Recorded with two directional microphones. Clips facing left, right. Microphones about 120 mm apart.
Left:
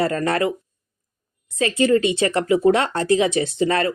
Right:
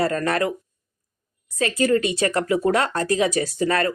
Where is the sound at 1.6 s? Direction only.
25° left (ahead or behind).